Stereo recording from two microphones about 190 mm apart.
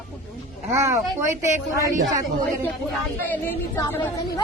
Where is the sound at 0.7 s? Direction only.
15° right (ahead or behind).